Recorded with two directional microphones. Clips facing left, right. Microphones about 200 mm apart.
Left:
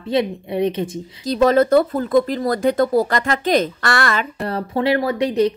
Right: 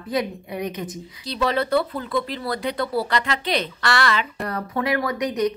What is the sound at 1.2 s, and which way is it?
Speech, 45° left (ahead or behind).